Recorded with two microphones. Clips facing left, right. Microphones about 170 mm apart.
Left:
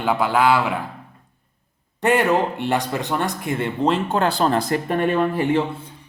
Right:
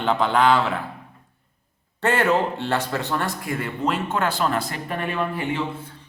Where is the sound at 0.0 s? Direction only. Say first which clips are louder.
Left 1 dB; 10° left (ahead or behind).